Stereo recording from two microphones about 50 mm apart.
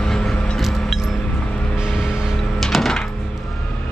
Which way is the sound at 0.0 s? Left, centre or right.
Centre.